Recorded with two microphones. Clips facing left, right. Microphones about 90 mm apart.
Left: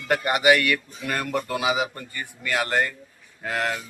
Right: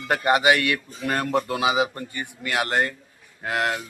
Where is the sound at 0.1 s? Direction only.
25° right (ahead or behind).